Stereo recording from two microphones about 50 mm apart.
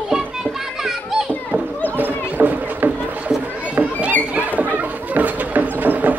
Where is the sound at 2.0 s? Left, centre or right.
Right.